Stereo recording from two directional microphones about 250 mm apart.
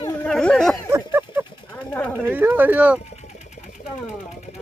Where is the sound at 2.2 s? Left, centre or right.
Centre.